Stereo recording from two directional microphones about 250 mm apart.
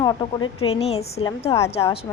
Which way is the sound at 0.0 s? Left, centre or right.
Centre.